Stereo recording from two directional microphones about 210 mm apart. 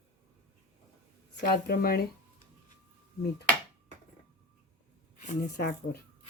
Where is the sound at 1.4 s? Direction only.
45° left (ahead or behind).